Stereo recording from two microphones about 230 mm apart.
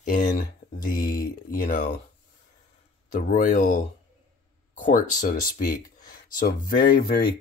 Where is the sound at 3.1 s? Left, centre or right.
Left.